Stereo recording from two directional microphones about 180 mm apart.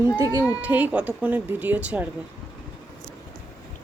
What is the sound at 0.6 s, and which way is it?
Speech, 10° right (ahead or behind).